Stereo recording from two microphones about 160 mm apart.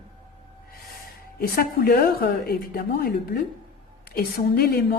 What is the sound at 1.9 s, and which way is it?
Speech, 80° left.